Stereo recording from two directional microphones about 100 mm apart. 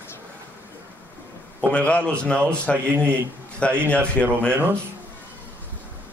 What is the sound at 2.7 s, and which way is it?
Speech, 20° right (ahead or behind).